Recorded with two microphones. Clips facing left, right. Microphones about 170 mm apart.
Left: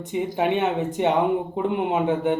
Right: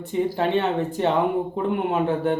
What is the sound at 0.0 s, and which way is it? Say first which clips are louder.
Speech: right 1 dB; 20° left (ahead or behind).